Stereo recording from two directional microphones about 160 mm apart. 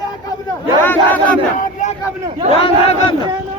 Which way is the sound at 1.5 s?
50° left (ahead or behind).